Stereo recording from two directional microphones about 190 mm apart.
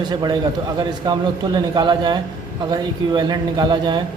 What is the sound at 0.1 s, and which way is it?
A man's voice, 20° right (ahead or behind).